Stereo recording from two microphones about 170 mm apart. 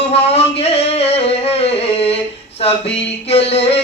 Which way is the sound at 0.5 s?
35° left (ahead or behind).